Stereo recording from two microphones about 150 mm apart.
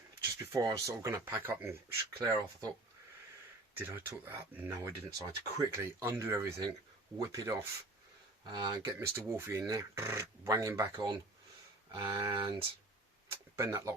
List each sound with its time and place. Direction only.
0.5 s speech: 20° right (ahead or behind)
3.8 s speech: 15° right (ahead or behind); by 12.5 s 30° right (ahead or behind)
13.6 s speech: 20° right (ahead or behind)